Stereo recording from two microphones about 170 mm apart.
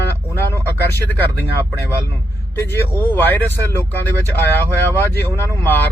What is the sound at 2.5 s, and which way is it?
Speech, 15° left (ahead or behind).